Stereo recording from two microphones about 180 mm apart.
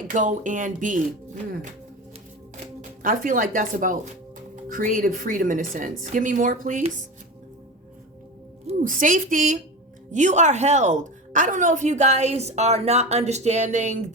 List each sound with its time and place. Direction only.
0.1 s speech: 45° right (ahead or behind)
3.0 s speech: 45° right (ahead or behind)
8.6 s a woman's voice: 45° right (ahead or behind)